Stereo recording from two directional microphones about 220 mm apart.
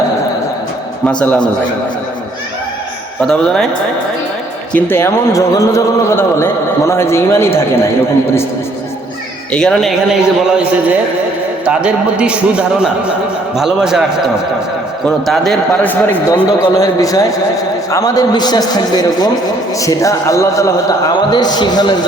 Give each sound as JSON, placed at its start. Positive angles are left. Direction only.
{"t": 1.0, "sound": "a man's voice", "side_deg": 5}
{"t": 3.2, "sound": "a man's voice", "side_deg": 5}
{"t": 4.7, "sound": "a man's voice", "side_deg": 10}
{"t": 9.5, "sound": "a man's voice", "side_deg": 5}
{"t": 15.0, "sound": "a man's voice", "side_deg": 5}